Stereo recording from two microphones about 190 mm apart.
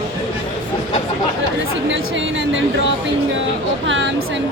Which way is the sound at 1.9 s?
80° right.